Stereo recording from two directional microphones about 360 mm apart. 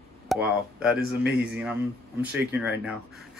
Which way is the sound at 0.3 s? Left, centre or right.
Centre.